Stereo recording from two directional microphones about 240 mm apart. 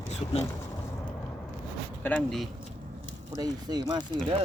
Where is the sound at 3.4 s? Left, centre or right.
Centre.